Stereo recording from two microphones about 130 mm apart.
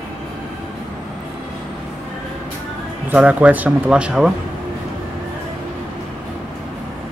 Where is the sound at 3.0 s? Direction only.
10° right (ahead or behind).